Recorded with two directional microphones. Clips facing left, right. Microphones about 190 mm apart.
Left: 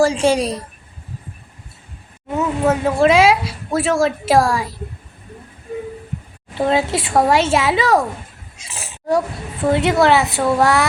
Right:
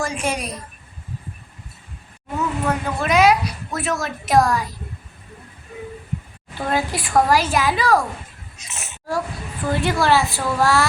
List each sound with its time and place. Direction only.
0.0 s a woman's voice: 30° left (ahead or behind)
2.6 s a woman's voice: 25° left (ahead or behind)
6.5 s a woman's voice: 25° left (ahead or behind)